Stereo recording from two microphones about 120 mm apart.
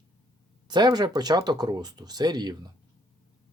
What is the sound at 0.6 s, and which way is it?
Speech, 35° right (ahead or behind).